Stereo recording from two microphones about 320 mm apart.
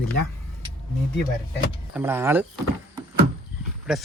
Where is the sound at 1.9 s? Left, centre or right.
Centre.